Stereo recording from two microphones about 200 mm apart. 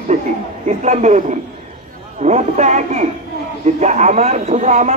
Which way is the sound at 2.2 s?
35° right (ahead or behind).